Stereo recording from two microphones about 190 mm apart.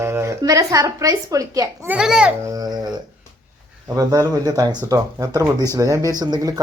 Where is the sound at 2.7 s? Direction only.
20° right (ahead or behind).